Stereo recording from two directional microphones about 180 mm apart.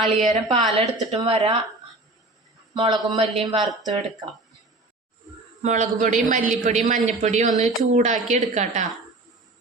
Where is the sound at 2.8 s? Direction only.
30° right (ahead or behind).